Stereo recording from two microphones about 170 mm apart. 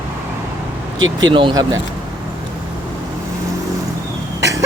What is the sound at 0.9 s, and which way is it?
Speech, 25° right (ahead or behind).